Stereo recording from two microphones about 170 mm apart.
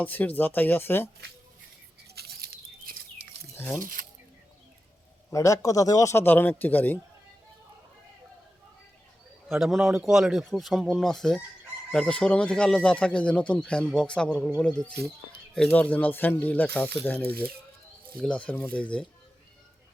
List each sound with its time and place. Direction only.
0.0 s a man's voice: 10° left (ahead or behind)
2.1 s a sound: 65° right (ahead or behind)
5.3 s a man's voice: 20° left (ahead or behind)
9.5 s a man's voice: centre (ahead or behind)